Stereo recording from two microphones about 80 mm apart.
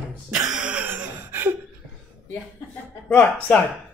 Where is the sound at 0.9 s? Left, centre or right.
Right.